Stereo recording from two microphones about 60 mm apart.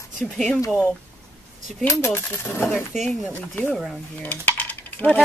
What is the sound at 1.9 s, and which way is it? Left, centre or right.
Coin, left.